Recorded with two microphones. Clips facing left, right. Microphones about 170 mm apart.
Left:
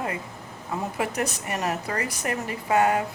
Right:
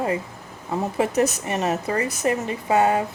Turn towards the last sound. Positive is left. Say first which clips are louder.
# right 2 dB
turn(degrees=-25)  # may be behind; listen again after turning